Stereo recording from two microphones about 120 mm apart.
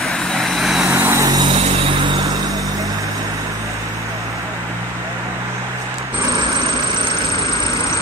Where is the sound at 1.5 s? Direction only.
45° right (ahead or behind).